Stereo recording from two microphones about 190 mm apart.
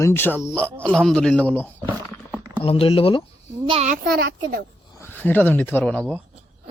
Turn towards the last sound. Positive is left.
turn(degrees=5)  # may be behind; listen again after turning